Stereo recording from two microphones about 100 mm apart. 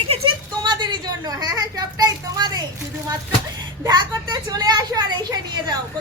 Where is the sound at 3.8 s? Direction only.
40° right (ahead or behind).